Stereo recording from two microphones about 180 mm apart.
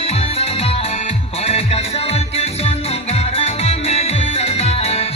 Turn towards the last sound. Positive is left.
turn(degrees=35)  # may be behind; listen again after turning